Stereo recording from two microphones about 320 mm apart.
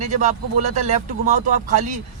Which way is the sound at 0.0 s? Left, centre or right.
Right.